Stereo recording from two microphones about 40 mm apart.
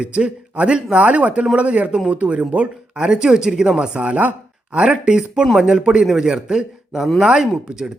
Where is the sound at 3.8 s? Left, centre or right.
Right.